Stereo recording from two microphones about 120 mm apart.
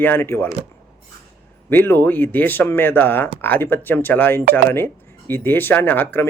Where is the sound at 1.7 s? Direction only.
15° left (ahead or behind).